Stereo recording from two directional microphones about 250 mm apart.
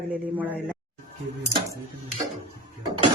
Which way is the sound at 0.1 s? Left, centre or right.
Centre.